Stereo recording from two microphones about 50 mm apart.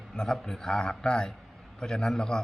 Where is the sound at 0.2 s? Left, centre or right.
Centre.